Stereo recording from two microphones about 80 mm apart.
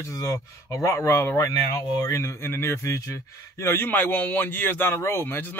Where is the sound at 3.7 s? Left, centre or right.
Left.